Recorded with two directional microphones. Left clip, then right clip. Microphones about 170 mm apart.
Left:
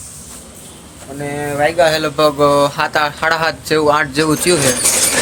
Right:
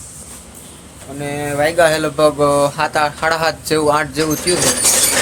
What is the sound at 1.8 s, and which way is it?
Speech, 55° right (ahead or behind).